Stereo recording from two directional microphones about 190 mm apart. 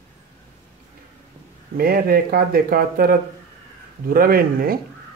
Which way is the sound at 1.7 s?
50° right (ahead or behind).